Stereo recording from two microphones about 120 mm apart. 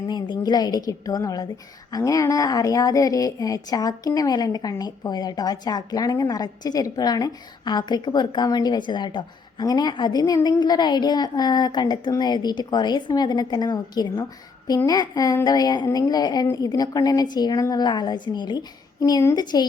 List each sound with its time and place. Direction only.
0.1 s speech: 35° left (ahead or behind)